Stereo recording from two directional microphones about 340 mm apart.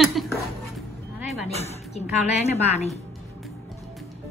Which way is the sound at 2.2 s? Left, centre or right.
Centre.